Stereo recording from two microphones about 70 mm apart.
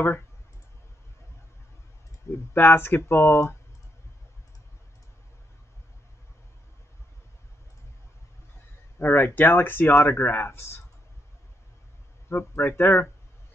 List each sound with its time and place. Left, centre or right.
2.5 s speech: left
8.9 s speech: left
12.3 s speech: left